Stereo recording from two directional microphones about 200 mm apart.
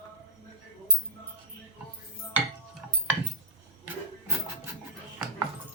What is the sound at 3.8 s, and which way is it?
Printer, 10° right (ahead or behind).